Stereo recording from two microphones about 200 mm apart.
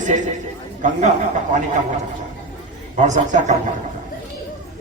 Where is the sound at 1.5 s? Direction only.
40° right (ahead or behind).